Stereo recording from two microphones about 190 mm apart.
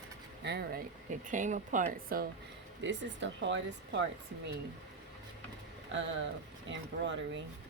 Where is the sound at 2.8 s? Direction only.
70° right (ahead or behind).